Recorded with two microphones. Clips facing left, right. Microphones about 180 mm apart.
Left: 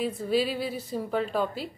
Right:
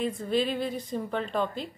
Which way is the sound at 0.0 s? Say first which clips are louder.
Left 1 dB; 5° left (ahead or behind).